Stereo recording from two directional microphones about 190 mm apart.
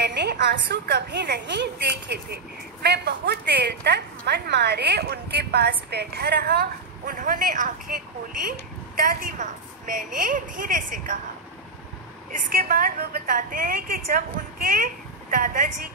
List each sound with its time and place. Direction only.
0.0 s a woman's voice: 60° right (ahead or behind)
8.9 s a woman's voice: 45° right (ahead or behind)
12.3 s a woman's voice: 45° right (ahead or behind)